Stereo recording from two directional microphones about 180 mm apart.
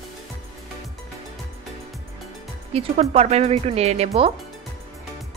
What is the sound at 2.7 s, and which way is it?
Speech, 35° right (ahead or behind).